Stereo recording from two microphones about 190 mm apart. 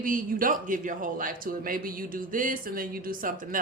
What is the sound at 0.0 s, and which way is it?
Speech, 45° right (ahead or behind).